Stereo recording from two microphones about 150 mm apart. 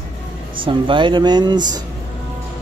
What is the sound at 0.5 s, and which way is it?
Speech, 35° right (ahead or behind).